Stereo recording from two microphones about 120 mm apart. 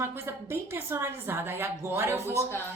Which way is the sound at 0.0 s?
20° right (ahead or behind).